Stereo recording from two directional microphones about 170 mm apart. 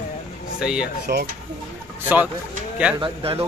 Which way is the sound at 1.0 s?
65° right (ahead or behind).